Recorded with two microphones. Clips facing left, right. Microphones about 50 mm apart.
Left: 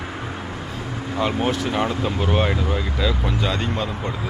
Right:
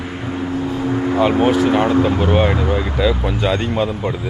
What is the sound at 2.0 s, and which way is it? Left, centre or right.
Speech, centre.